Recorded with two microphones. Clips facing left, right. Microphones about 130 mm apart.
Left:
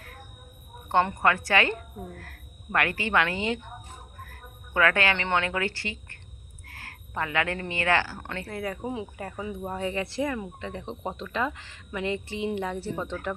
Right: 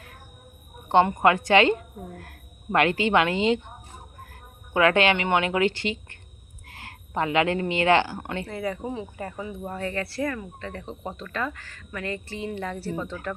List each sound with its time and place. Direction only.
0.9 s a woman's voice: 20° right (ahead or behind)
8.4 s speech: 5° left (ahead or behind)
9.4 s speech: 15° left (ahead or behind)